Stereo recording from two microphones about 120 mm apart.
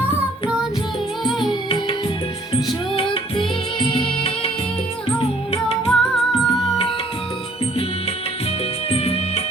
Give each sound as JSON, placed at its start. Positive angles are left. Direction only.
{"t": 1.2, "sound": "music", "side_deg": 0}
{"t": 2.5, "sound": "music", "side_deg": 50}
{"t": 5.9, "sound": "music", "side_deg": 5}
{"t": 8.9, "sound": "music", "side_deg": 60}